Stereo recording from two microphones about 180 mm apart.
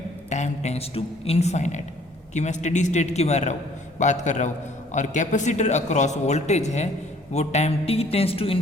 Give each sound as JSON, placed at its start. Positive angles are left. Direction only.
{"t": 0.3, "sound": "a man's voice", "side_deg": 40}